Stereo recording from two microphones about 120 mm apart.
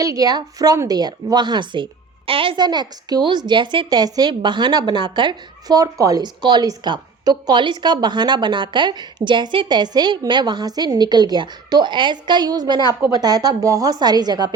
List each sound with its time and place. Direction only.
0.0 s a woman's voice: 30° right (ahead or behind)